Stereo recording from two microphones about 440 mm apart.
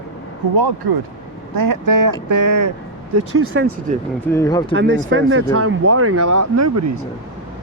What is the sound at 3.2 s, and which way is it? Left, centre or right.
Speech, right.